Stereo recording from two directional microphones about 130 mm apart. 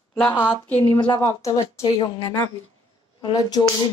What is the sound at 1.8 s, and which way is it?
Speech, 35° left (ahead or behind).